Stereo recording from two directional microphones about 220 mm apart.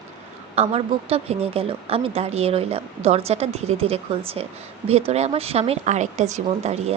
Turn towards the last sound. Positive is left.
turn(degrees=-30)  # may be behind; listen again after turning